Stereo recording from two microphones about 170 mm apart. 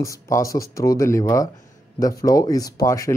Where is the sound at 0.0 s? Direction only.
20° left (ahead or behind).